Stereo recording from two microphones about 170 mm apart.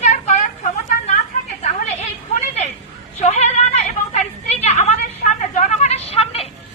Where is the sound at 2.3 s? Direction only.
40° left (ahead or behind).